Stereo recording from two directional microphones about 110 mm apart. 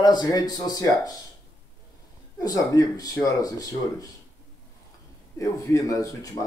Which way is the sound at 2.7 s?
35° left (ahead or behind).